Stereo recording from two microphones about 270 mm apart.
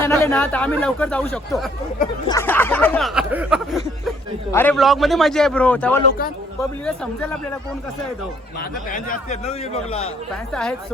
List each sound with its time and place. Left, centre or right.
0.0 s speech: centre
2.2 s speech: centre
8.9 s speech: left
10.5 s speech: centre